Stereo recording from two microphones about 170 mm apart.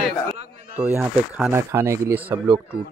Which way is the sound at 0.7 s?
10° right (ahead or behind).